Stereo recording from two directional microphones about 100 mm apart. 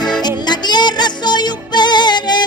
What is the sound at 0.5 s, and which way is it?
Music, 45° left (ahead or behind).